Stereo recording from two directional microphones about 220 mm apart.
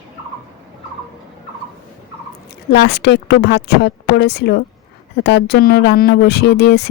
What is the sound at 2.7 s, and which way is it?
Speech, 50° left (ahead or behind).